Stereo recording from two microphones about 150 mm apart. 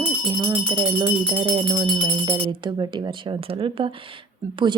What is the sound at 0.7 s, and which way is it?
Speech, 25° right (ahead or behind).